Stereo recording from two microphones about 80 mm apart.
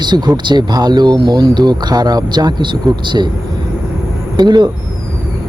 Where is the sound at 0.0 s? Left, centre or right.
Right.